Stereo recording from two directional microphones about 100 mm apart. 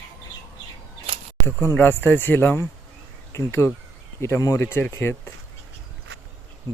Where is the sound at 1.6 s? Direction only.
20° left (ahead or behind).